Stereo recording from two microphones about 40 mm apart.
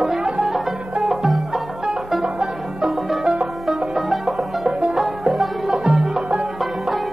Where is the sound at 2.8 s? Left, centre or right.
Centre.